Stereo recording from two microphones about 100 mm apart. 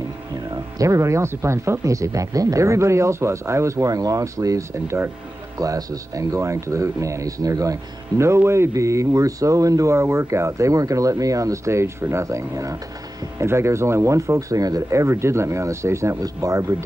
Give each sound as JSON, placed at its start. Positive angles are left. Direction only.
{"t": 0.5, "sound": "speech", "side_deg": -35}
{"t": 5.6, "sound": "speech", "side_deg": -35}